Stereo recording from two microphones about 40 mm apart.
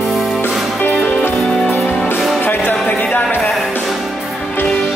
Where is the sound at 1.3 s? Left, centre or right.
Centre.